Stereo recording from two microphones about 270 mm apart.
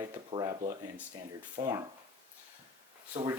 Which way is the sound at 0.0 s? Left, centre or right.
Centre.